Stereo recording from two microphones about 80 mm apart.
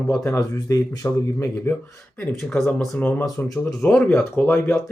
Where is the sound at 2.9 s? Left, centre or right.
Left.